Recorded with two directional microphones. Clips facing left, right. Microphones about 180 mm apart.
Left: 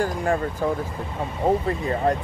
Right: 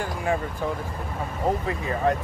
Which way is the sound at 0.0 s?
40° left (ahead or behind).